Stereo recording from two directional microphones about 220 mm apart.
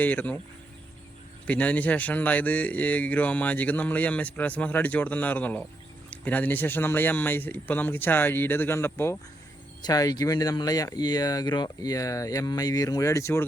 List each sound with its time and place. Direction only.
0.0 s speech: 5° left (ahead or behind)
1.5 s speech: 5° left (ahead or behind)